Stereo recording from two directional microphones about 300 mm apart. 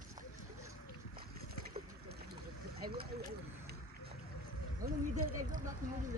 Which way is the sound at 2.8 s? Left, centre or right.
Right.